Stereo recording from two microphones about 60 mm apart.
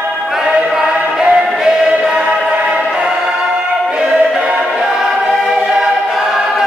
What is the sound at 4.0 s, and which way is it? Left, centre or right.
Choir, centre.